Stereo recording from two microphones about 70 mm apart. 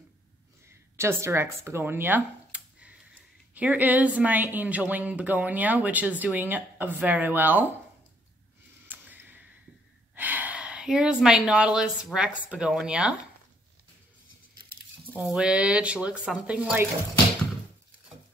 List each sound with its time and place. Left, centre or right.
0.7 s speech: right
8.8 s a sound: right
10.1 s speech: right
15.1 s speech: centre